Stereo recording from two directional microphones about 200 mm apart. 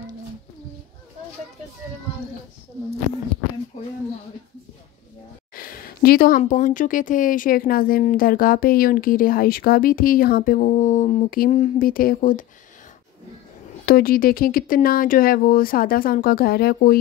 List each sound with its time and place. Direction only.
5.5 s speech: 45° left (ahead or behind)
13.8 s speech: 45° left (ahead or behind)